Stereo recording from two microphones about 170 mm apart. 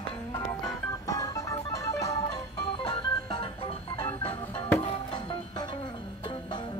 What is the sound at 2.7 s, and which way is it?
Organ, 30° left (ahead or behind).